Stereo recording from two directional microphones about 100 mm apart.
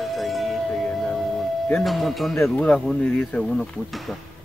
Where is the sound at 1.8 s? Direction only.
Centre (ahead or behind).